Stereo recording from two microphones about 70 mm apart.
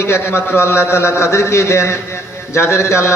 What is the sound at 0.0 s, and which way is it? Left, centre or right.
A man's voice, left.